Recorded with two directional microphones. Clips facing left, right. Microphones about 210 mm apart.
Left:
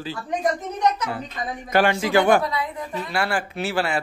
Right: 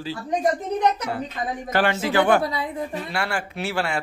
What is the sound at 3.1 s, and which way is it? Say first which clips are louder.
Speech: left 6 dB; centre (ahead or behind).